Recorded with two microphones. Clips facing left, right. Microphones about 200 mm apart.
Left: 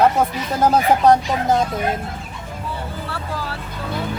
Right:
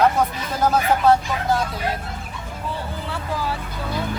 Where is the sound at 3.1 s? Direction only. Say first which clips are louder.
Right 5 dB; 15° right (ahead or behind).